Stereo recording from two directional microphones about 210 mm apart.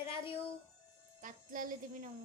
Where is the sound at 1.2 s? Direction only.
40° right (ahead or behind).